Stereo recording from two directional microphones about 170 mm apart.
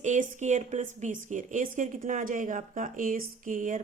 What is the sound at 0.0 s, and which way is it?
Speech, 45° right (ahead or behind).